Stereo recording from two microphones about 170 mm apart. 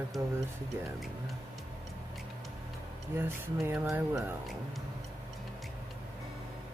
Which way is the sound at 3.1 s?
15° right (ahead or behind).